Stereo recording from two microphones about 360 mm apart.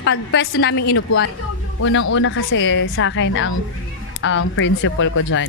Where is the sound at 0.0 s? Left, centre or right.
Left.